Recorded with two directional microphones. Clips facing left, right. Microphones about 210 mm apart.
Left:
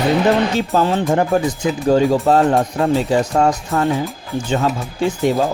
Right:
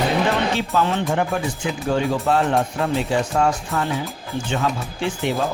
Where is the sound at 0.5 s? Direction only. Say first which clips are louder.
Left 4 dB; 40° left (ahead or behind).